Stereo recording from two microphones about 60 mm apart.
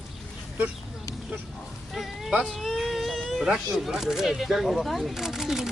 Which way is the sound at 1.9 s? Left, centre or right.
Centre.